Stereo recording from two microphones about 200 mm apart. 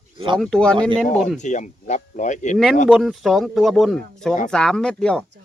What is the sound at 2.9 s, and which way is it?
Speech, centre (ahead or behind).